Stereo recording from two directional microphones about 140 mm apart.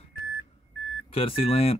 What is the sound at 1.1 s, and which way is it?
Speech, 45° left (ahead or behind).